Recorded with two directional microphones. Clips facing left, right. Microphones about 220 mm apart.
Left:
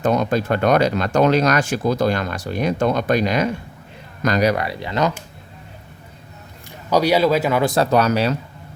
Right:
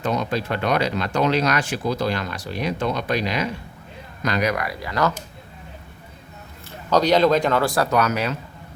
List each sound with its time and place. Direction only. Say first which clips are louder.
0.0 s speech: left 5 dB; 45° left (ahead or behind); by 5.1 s 20° left (ahead or behind)
6.7 s speech: left 1 dB; 10° left (ahead or behind)
7.6 s speech: left 3 dB; 25° left (ahead or behind)